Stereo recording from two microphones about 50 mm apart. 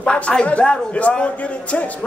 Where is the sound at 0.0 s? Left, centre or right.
Left.